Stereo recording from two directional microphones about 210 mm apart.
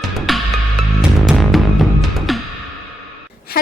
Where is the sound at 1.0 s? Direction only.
Centre (ahead or behind).